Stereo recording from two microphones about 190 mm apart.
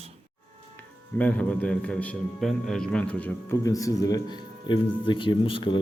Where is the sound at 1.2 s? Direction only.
5° left (ahead or behind).